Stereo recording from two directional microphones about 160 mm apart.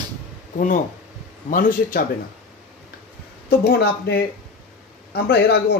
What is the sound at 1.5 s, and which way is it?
Speech, 65° left (ahead or behind).